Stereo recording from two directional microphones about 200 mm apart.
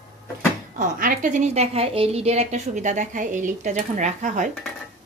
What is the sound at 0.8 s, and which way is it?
A woman's voice, 40° right (ahead or behind).